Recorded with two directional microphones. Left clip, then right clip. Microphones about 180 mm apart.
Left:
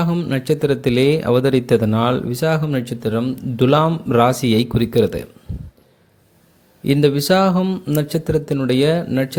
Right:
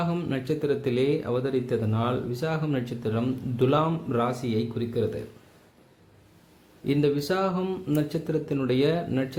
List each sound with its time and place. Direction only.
0.0 s speech: 25° left (ahead or behind)
6.8 s speech: 35° left (ahead or behind)